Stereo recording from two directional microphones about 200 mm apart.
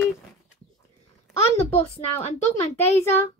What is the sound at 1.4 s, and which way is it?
A child's voice, 30° left (ahead or behind).